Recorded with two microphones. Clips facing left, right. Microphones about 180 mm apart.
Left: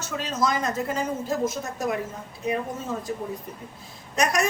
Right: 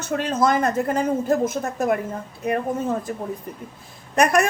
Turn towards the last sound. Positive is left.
turn(degrees=-60)  # may be behind; listen again after turning